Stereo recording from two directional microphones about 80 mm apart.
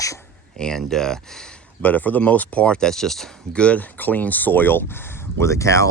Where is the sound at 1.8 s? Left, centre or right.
Left; by 3.6 s centre.